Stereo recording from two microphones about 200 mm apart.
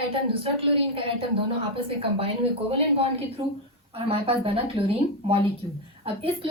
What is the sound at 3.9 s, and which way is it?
A woman's voice, 30° right (ahead or behind).